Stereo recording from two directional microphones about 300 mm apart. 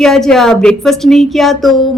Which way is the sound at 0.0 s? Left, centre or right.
Centre.